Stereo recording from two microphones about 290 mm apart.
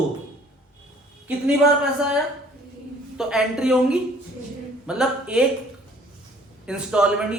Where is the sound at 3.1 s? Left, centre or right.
Centre.